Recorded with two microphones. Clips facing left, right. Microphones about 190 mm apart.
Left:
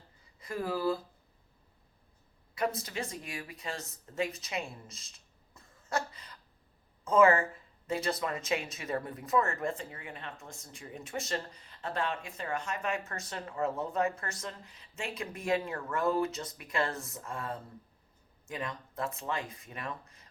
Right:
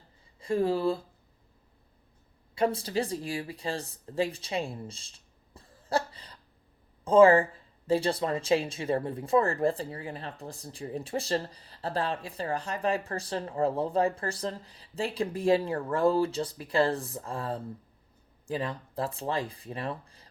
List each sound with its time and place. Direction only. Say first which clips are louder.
0.3 s speech: right 8 dB; 30° right (ahead or behind)
2.6 s speech: right 6 dB; 30° right (ahead or behind)